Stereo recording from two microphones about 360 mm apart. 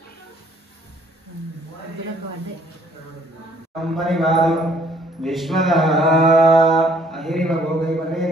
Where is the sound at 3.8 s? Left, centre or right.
Centre.